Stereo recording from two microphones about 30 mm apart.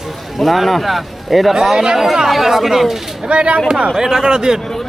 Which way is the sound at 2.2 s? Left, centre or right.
Centre.